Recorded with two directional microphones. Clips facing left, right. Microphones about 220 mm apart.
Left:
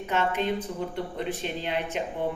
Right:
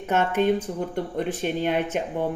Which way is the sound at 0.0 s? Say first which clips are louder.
Right 5 dB; 50° right (ahead or behind).